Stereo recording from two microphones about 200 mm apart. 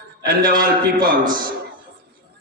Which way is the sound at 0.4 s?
45° right (ahead or behind).